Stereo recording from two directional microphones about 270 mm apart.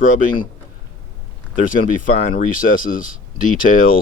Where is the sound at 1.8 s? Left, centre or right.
Left.